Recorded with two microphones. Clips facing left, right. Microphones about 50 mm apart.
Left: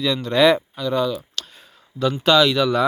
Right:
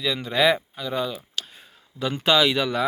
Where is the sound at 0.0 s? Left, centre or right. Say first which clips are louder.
Left 5 dB; centre.